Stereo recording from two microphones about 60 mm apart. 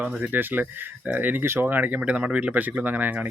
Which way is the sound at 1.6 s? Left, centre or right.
Right.